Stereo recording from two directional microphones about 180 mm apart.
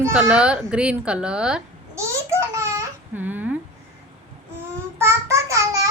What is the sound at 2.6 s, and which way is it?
Babbling, 15° right (ahead or behind).